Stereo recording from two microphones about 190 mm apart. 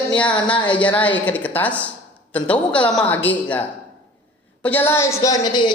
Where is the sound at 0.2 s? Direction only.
5° left (ahead or behind).